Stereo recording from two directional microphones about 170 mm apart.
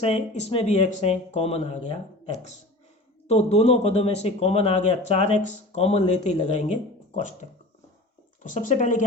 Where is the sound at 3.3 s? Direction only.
40° left (ahead or behind).